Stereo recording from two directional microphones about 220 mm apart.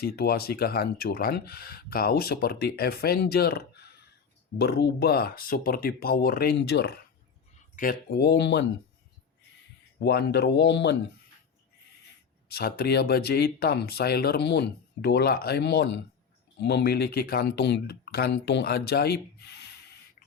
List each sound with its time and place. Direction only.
0.0 s speech: 45° left (ahead or behind)
10.0 s speech: 45° left (ahead or behind)
12.5 s speech: 45° left (ahead or behind)